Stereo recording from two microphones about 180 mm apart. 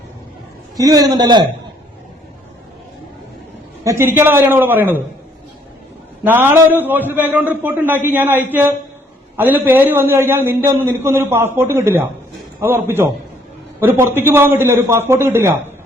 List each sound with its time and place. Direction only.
0.8 s a man's voice: 20° right (ahead or behind)
3.8 s a man's voice: 15° right (ahead or behind)
6.2 s a man's voice: 10° right (ahead or behind)